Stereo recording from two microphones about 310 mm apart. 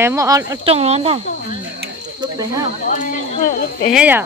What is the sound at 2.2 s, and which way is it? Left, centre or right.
Snake, centre.